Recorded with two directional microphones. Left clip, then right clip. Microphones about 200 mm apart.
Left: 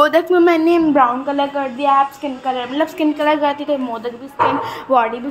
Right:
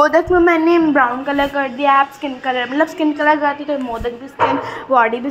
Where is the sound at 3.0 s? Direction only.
5° left (ahead or behind).